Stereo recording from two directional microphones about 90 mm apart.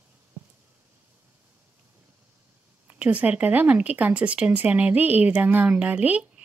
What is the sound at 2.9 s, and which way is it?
Speech, 15° right (ahead or behind).